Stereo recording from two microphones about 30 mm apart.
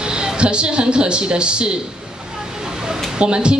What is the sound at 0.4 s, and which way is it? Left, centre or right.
A woman's voice, right.